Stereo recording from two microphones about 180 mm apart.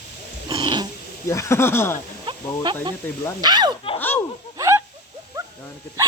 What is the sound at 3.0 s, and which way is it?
Speech, 10° left (ahead or behind).